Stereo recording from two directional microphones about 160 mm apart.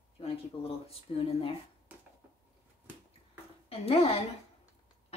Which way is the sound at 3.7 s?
40° left (ahead or behind).